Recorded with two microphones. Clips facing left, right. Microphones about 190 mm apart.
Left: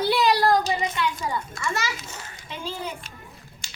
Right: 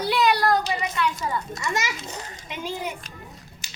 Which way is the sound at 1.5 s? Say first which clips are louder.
Right 1 dB; 20° right (ahead or behind).